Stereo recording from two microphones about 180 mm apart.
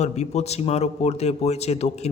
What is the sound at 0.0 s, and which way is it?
A man's voice, 40° left (ahead or behind).